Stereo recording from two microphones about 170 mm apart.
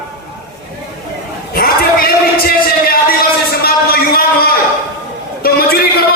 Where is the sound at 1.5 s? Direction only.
60° left (ahead or behind).